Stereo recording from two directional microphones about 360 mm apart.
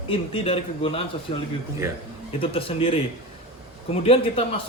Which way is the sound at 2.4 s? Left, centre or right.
Centre.